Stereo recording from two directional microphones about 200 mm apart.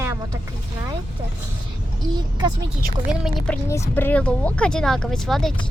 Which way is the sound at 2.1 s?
20° right (ahead or behind).